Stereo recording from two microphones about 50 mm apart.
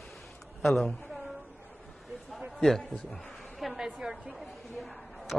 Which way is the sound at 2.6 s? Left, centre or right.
Centre.